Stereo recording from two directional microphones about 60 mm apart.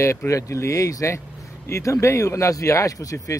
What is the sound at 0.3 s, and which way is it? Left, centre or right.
Speech, left.